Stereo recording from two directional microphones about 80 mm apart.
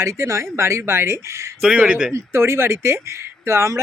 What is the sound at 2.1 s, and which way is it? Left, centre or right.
Speech, right.